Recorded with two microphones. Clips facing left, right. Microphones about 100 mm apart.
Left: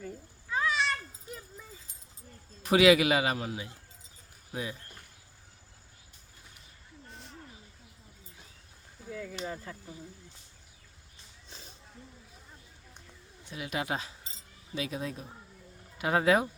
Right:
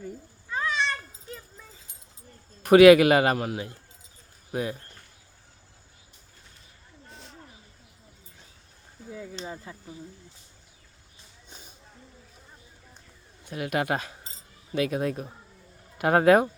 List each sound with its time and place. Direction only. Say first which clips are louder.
0.4 s children playing: right 1 dB; 5° left (ahead or behind)
2.6 s a man's voice: right 8 dB; 55° right (ahead or behind)
9.0 s a sound: right 1 dB; 20° right (ahead or behind)
9.4 s speech: even; 15° right (ahead or behind)
11.4 s a sound: right 1 dB; 20° right (ahead or behind)
13.4 s a man's voice: right 7 dB; 55° right (ahead or behind)